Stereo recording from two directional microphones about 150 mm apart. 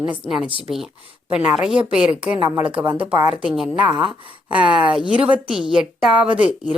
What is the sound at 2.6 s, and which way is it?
Speech, 35° right (ahead or behind).